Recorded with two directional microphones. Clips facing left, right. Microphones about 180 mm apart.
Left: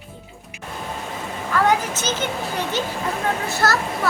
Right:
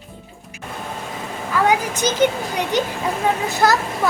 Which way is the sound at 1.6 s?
15° right (ahead or behind).